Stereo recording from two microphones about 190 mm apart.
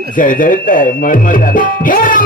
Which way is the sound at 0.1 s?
45° left (ahead or behind).